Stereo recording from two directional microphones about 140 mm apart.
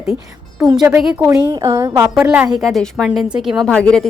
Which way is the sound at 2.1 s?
5° right (ahead or behind).